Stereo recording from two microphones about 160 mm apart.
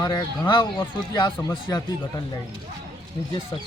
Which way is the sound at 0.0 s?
25° left (ahead or behind).